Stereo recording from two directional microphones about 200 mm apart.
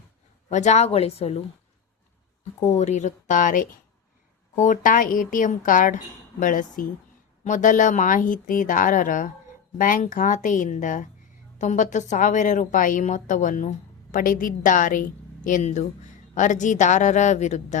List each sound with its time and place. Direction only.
0.5 s a woman's voice: 35° left (ahead or behind)